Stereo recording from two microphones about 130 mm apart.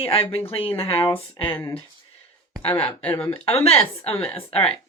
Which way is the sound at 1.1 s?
40° left (ahead or behind).